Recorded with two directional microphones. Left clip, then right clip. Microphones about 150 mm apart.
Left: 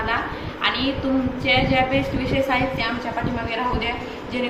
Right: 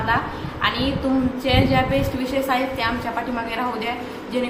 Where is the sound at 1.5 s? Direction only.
25° right (ahead or behind).